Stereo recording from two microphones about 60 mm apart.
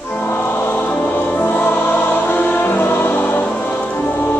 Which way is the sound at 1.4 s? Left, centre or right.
Left.